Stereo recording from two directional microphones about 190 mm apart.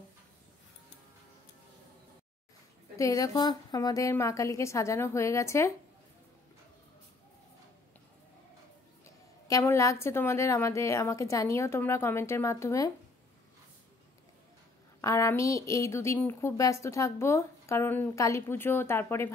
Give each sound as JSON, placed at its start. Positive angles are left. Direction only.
{"t": 3.0, "sound": "a woman's voice", "side_deg": 20}
{"t": 9.5, "sound": "a woman's voice", "side_deg": 15}
{"t": 15.0, "sound": "a woman's voice", "side_deg": 15}